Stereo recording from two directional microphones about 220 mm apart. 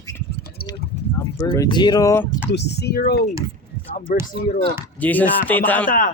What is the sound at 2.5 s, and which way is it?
Speech, 50° left (ahead or behind).